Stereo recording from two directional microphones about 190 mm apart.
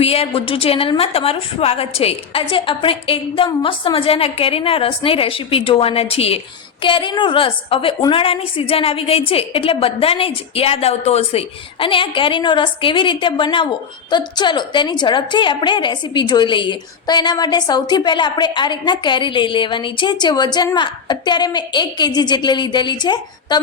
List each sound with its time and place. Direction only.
0.0 s a woman's voice: 30° left (ahead or behind)